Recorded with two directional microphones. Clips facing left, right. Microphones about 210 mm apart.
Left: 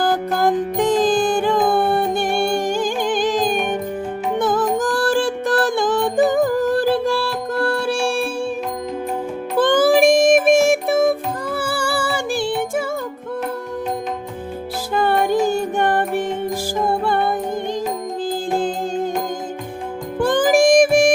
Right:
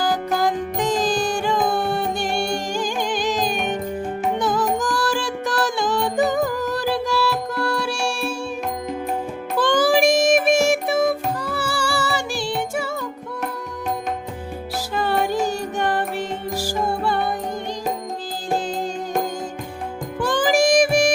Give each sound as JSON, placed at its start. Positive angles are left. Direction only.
{"t": 0.0, "sound": "music", "side_deg": 55}
{"t": 9.6, "sound": "music", "side_deg": 55}
{"t": 14.9, "sound": "music", "side_deg": 55}
{"t": 20.1, "sound": "music", "side_deg": 55}